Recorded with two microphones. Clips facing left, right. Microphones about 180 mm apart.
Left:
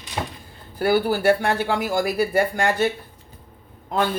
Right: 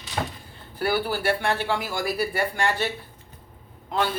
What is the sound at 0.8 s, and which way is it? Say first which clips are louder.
Speech: left 6 dB; 45° left (ahead or behind).